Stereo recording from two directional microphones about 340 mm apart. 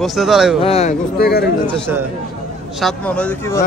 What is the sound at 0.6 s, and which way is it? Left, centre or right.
Speech, centre.